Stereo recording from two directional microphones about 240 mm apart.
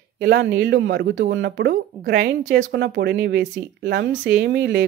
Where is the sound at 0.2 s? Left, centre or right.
Right.